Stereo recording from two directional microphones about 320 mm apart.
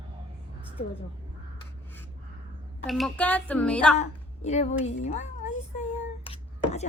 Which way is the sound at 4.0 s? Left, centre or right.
Left.